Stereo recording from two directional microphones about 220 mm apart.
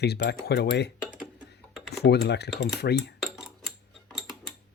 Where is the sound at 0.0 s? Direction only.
50° left (ahead or behind).